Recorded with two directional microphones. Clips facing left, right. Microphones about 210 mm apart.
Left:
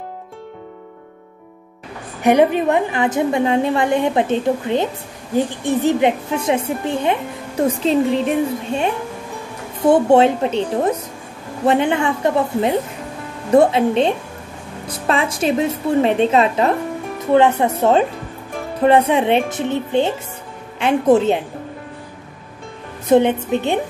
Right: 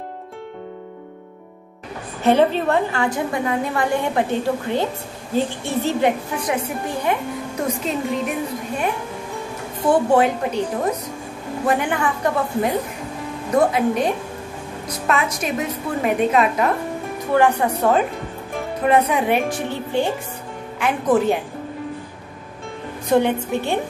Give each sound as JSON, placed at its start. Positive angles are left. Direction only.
{"t": 2.2, "sound": "a woman's voice", "side_deg": 15}
{"t": 23.0, "sound": "a woman's voice", "side_deg": 20}